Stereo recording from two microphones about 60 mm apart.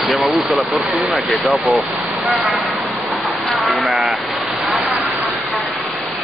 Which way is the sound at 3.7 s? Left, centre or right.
Centre.